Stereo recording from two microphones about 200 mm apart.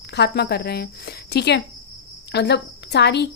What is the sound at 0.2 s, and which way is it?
A woman's voice, 55° left (ahead or behind).